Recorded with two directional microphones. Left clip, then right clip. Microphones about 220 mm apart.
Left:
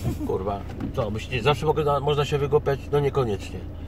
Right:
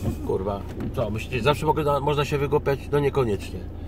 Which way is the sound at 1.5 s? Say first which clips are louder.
Even; 25° right (ahead or behind).